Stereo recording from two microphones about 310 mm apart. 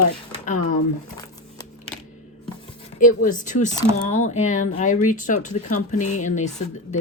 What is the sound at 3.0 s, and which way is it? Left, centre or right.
Speech, left.